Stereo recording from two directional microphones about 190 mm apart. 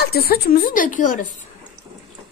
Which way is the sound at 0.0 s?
55° left (ahead or behind).